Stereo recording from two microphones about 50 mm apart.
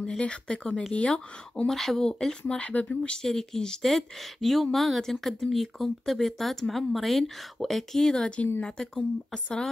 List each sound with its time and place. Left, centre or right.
0.2 s speech: centre
1.7 s speech: centre